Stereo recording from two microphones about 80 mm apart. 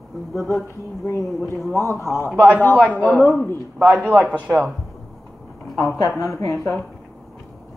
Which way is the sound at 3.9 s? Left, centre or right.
Right.